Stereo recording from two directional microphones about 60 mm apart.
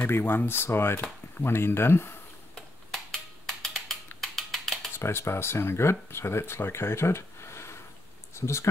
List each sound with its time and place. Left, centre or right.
0.0 s speech: left
2.5 s a sound: centre
4.9 s speech: left